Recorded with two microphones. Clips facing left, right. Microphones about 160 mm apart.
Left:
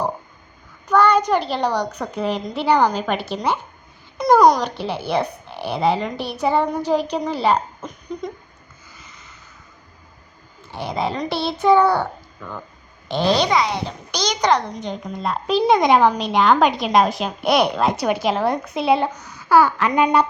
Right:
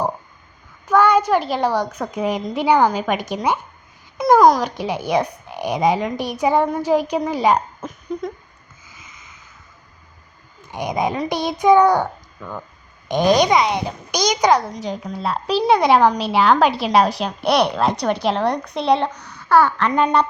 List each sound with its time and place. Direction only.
0.9 s a woman's voice: 10° right (ahead or behind)
4.7 s a woman's voice: 10° right (ahead or behind)
10.6 s a woman's voice: 15° right (ahead or behind)
13.1 s a child's voice: 15° right (ahead or behind); by 20.2 s 10° left (ahead or behind)